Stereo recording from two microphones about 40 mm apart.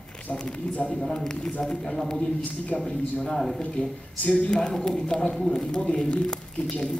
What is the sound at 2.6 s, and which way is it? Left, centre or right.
Speech, left.